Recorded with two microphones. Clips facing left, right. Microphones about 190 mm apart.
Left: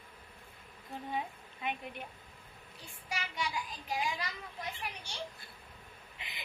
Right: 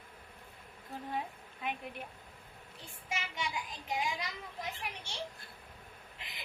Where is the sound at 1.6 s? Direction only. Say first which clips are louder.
Left 1 dB; centre (ahead or behind).